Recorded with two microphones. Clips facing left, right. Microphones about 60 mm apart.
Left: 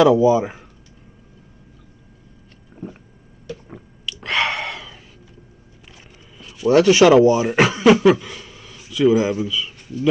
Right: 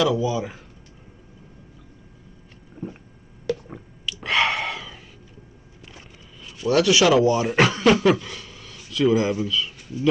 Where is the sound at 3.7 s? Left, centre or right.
Centre.